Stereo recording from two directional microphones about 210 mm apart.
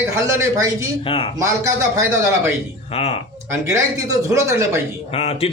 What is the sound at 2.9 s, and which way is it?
Speech, 30° left (ahead or behind).